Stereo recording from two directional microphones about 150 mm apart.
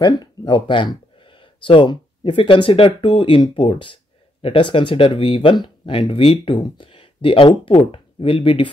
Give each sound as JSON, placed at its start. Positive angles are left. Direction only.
{"t": 0.0, "sound": "speech", "side_deg": 30}